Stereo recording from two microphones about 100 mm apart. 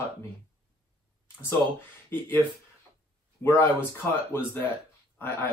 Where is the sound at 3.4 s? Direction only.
25° left (ahead or behind).